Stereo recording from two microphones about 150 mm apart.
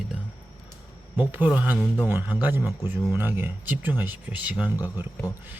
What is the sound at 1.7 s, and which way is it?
Speech, 15° left (ahead or behind).